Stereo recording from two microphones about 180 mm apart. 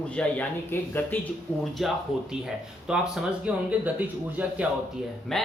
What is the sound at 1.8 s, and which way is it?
Speech, centre (ahead or behind).